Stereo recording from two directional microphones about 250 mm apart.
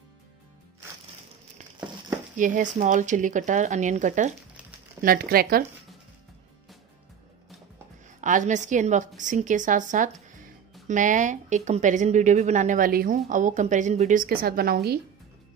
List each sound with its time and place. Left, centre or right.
2.3 s a woman's voice: right
8.2 s a woman's voice: right